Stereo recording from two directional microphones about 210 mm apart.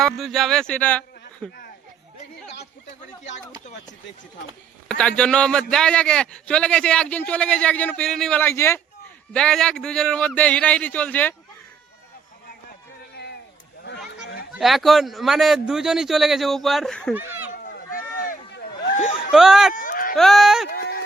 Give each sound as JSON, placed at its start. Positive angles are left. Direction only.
{"t": 0.0, "sound": "a man's voice", "side_deg": 0}
{"t": 4.9, "sound": "a man's voice", "side_deg": 5}
{"t": 14.5, "sound": "a man's voice", "side_deg": 0}
{"t": 17.6, "sound": "run", "side_deg": 40}
{"t": 19.3, "sound": "a man's voice", "side_deg": 0}
{"t": 19.7, "sound": "a sound", "side_deg": 40}
{"t": 20.1, "sound": "a man's voice", "side_deg": 0}
{"t": 20.7, "sound": "music", "side_deg": 45}